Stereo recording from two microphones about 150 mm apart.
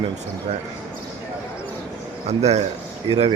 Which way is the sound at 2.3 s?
45° right (ahead or behind).